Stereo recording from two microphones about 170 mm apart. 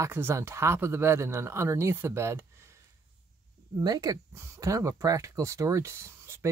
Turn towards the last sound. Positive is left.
turn(degrees=-15)  # may be behind; listen again after turning